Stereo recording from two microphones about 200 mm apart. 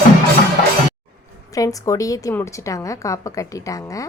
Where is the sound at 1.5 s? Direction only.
15° left (ahead or behind).